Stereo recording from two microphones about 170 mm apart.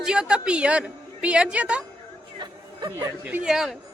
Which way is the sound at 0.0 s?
5° right (ahead or behind).